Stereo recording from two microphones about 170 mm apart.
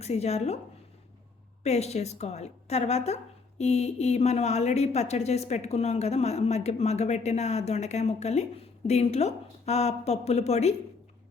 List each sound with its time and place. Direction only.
0.0 s a woman's voice: 40° left (ahead or behind)
1.6 s a woman's voice: 40° left (ahead or behind)